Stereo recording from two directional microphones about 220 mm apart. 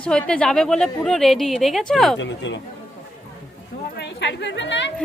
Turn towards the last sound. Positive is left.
turn(degrees=55)  # may be behind; listen again after turning